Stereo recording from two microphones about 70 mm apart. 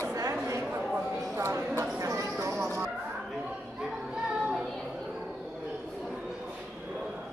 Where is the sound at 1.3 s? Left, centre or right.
Right.